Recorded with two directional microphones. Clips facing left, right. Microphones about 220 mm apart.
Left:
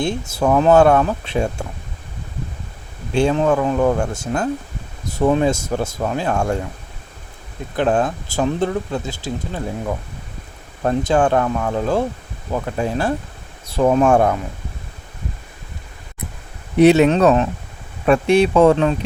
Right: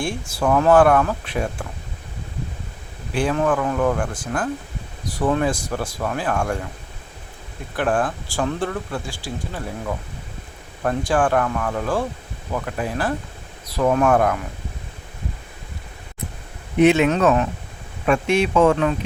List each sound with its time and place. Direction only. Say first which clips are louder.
0.0 s speech: left 4 dB; 20° left (ahead or behind)
3.1 s speech: left 4 dB; 25° left (ahead or behind)
7.8 s speech: left 3 dB; 20° left (ahead or behind)
10.8 s speech: left 3 dB; 25° left (ahead or behind)
16.7 s speech: left 4 dB; 35° left (ahead or behind)